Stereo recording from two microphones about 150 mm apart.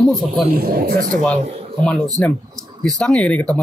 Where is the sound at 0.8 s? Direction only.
90° right.